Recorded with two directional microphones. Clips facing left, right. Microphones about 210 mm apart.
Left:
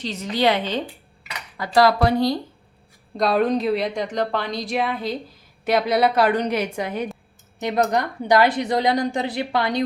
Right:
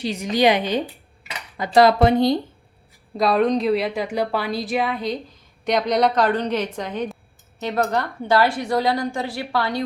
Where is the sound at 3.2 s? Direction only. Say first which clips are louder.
Right 1 dB; centre (ahead or behind).